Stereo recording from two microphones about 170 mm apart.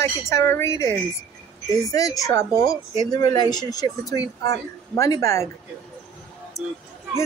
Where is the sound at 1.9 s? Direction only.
20° left (ahead or behind).